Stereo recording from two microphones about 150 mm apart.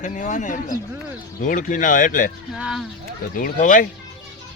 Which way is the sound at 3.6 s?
60° left (ahead or behind).